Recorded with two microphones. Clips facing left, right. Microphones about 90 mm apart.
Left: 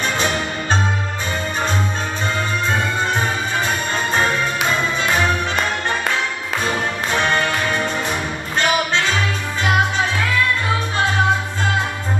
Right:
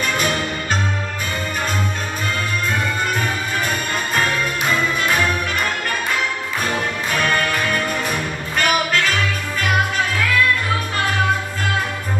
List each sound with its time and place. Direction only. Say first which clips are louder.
0.0 s music: even; 30° left (ahead or behind)
3.2 s music: left 1 dB; 25° left (ahead or behind)
7.1 s music: left 1 dB; 25° left (ahead or behind)